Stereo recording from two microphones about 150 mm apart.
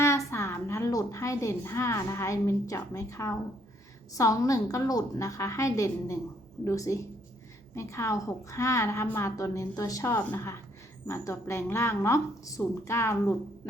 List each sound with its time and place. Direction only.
0.0 s a woman's voice: 20° left (ahead or behind)